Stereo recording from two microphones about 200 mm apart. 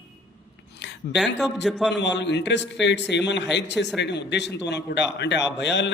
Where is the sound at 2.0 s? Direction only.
60° left (ahead or behind).